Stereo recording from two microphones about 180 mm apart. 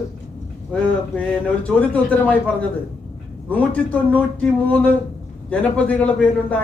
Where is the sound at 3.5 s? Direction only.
10° left (ahead or behind).